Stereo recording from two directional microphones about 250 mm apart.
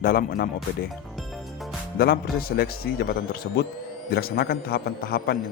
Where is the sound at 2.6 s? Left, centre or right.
Left.